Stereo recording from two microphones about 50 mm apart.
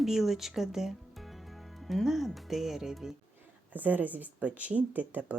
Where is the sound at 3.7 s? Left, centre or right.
Right.